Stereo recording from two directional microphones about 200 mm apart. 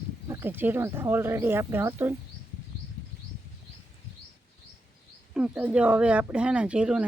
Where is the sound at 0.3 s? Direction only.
10° right (ahead or behind).